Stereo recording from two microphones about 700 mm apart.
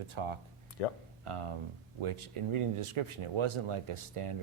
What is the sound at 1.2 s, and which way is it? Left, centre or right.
Speech, right.